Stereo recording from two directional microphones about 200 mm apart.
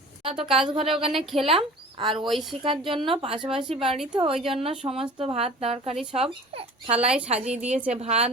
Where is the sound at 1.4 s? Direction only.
25° right (ahead or behind).